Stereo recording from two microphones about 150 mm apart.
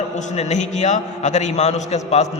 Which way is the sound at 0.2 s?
50° left (ahead or behind).